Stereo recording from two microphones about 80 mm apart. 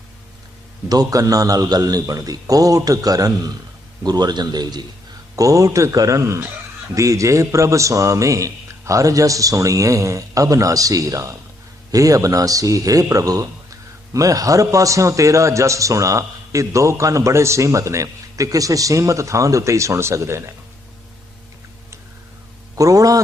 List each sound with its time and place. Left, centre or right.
0.9 s a man's voice: right
5.4 s a man's voice: right
22.7 s a man's voice: right